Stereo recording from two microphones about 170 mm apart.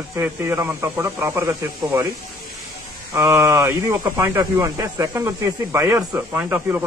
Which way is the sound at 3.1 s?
15° right (ahead or behind).